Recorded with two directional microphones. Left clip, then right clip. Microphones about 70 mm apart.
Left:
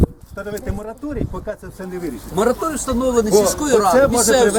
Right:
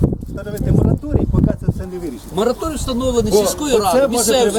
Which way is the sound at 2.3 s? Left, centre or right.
Centre.